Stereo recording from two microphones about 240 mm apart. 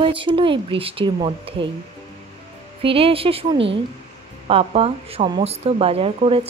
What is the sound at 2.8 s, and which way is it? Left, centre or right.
Speech, right.